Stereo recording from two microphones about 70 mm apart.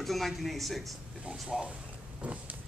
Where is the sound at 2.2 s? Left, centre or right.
Right.